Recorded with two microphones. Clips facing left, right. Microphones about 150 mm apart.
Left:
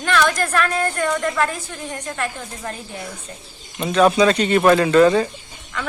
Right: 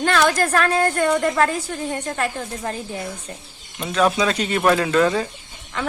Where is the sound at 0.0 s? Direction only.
35° right (ahead or behind).